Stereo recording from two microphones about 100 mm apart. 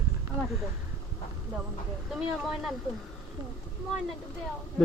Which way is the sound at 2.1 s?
5° right (ahead or behind).